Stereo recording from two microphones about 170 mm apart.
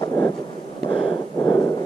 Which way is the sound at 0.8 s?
30° left (ahead or behind).